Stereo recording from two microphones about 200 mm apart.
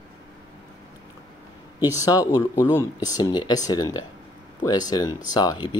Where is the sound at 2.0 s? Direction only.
20° left (ahead or behind).